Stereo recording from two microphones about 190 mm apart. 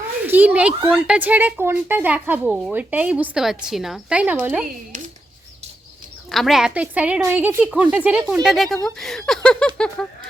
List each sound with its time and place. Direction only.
0.3 s speech: 10° right (ahead or behind)
6.3 s speech: centre (ahead or behind)